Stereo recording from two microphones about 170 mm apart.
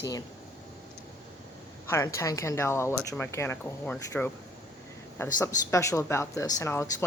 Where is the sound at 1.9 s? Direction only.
15° left (ahead or behind).